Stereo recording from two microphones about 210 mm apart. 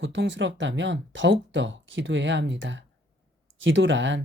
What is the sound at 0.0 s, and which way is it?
Speech, 60° right (ahead or behind).